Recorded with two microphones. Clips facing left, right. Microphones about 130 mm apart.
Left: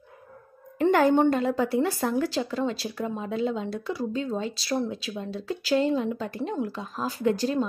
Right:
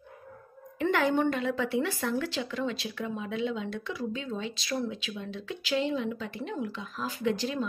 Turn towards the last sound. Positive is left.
turn(degrees=40)  # may be behind; listen again after turning